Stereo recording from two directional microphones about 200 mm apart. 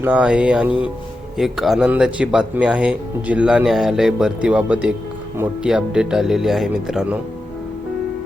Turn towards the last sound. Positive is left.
turn(degrees=-5)  # may be behind; listen again after turning